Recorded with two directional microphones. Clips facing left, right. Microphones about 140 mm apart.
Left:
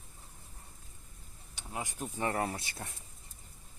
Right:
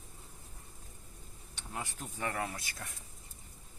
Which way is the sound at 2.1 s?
30° left (ahead or behind).